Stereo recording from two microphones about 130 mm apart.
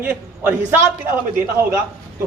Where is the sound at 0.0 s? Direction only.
10° right (ahead or behind).